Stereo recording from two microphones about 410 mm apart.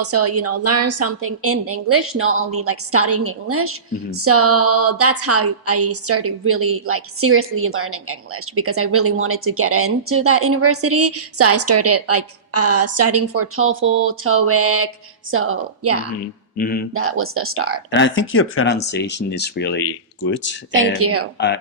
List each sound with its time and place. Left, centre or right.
0.0 s speech: right
16.6 s speech: left
16.9 s speech: right
17.9 s speech: left
21.0 s speech: right
21.3 s speech: left